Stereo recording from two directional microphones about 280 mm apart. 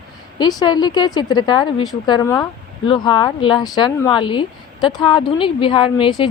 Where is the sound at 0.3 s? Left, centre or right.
Centre.